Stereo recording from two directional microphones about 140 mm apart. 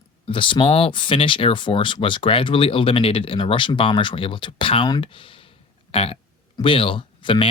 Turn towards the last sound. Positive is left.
turn(degrees=35)  # may be behind; listen again after turning